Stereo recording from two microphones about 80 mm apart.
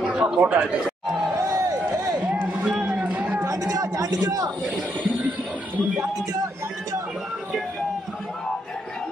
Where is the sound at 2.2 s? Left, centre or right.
Centre.